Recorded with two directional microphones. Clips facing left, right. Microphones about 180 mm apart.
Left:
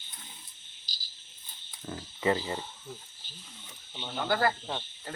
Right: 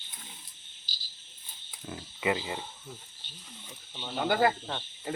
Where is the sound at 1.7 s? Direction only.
5° right (ahead or behind).